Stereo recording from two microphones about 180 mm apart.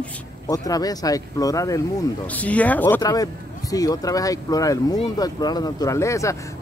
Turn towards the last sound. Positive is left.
turn(degrees=15)  # may be behind; listen again after turning